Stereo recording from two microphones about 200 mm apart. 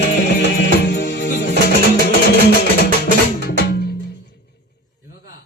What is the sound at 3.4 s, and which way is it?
Music, 55° left (ahead or behind).